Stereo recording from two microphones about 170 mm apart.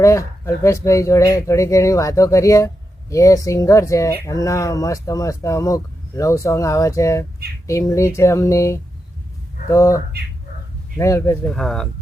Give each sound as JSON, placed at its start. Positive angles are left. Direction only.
{"t": 0.0, "sound": "speech", "side_deg": 15}
{"t": 11.5, "sound": "speech", "side_deg": 5}